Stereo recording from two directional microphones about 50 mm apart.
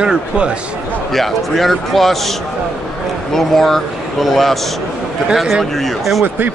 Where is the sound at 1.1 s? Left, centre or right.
Centre.